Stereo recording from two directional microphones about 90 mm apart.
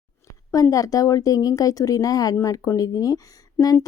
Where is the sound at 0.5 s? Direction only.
40° left (ahead or behind).